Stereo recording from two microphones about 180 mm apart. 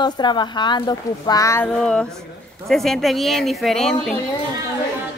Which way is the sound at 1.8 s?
5° left (ahead or behind).